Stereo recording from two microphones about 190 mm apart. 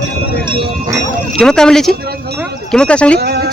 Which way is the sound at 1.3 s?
5° left (ahead or behind).